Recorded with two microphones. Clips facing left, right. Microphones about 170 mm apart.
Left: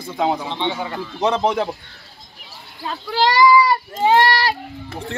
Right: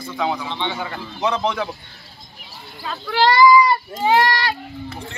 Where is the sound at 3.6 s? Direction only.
30° left (ahead or behind).